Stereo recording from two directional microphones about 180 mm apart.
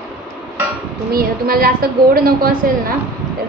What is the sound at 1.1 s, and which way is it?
A woman's voice, 55° right (ahead or behind).